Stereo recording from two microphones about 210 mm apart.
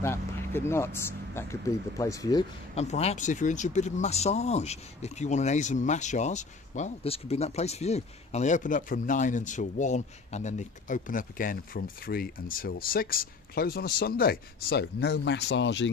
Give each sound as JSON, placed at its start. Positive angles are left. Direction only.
{"t": 0.0, "sound": "speech", "side_deg": 10}
{"t": 2.7, "sound": "speech", "side_deg": 30}